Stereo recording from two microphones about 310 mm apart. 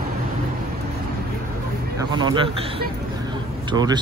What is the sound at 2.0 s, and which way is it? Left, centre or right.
Speech, centre.